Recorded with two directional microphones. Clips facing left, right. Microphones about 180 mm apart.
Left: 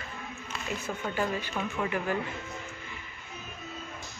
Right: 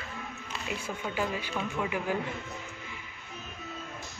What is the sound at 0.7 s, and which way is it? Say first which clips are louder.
Speech: left 2 dB; 10° right (ahead or behind).